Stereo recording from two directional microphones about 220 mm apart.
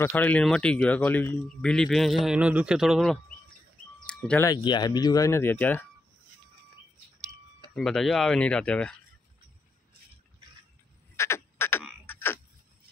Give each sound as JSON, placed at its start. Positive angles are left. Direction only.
{"t": 0.0, "sound": "speech", "side_deg": 10}
{"t": 4.0, "sound": "music", "side_deg": 5}
{"t": 4.5, "sound": "speech", "side_deg": 20}
{"t": 7.7, "sound": "speech", "side_deg": 0}
{"t": 11.1, "sound": "frog", "side_deg": 10}